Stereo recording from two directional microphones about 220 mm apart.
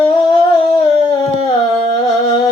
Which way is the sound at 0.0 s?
20° left (ahead or behind).